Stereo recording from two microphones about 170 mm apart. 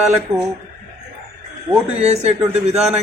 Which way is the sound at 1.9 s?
40° right (ahead or behind).